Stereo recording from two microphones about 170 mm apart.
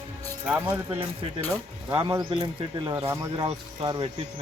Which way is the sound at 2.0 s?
20° right (ahead or behind).